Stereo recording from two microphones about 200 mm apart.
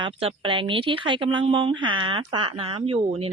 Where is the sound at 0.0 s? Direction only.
25° right (ahead or behind).